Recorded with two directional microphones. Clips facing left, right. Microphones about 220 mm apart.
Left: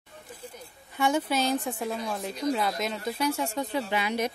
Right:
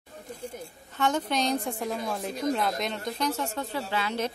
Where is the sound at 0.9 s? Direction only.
10° left (ahead or behind).